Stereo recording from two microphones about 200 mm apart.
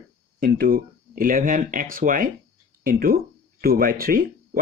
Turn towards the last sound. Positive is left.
turn(degrees=-45)  # may be behind; listen again after turning